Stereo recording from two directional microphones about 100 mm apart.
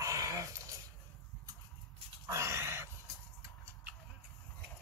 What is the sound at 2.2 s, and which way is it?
Dog, 30° right (ahead or behind).